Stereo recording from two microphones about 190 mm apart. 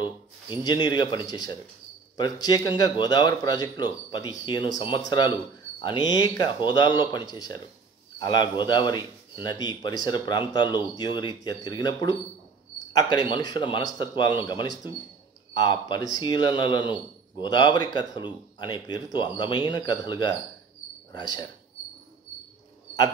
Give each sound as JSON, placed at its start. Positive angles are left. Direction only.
{"t": 0.5, "sound": "a man's voice", "side_deg": 20}